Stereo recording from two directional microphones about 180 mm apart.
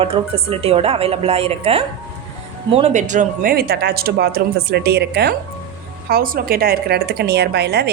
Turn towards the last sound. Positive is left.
turn(degrees=-65)  # may be behind; listen again after turning